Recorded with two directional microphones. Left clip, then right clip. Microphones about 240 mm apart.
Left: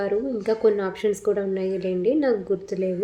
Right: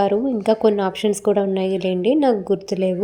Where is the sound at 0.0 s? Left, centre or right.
Right.